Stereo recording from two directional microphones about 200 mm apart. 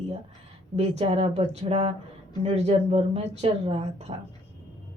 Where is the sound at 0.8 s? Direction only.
30° right (ahead or behind).